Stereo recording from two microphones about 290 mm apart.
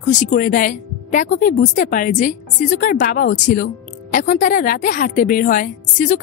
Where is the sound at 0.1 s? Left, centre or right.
Left.